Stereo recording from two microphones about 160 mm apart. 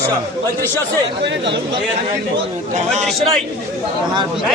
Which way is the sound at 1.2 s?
90° right.